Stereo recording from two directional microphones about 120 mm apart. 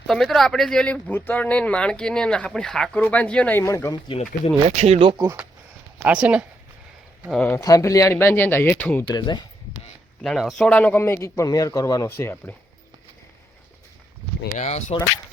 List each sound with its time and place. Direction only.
0.1 s speech: centre (ahead or behind); by 3.9 s 20° left (ahead or behind)
4.1 s speech: 50° left (ahead or behind)
4.6 s speech: 55° right (ahead or behind)
6.0 s speech: 10° right (ahead or behind)
7.3 s speech: 5° left (ahead or behind)
7.5 s speech: 30° left (ahead or behind)
9.0 s speech: 40° left (ahead or behind)
10.2 s speech: centre (ahead or behind)
10.8 s speech: 10° left (ahead or behind)
11.0 s speech: 25° left (ahead or behind)
14.6 s speech: 80° left